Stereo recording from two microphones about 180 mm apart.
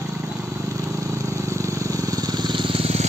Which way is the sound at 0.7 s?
15° right (ahead or behind).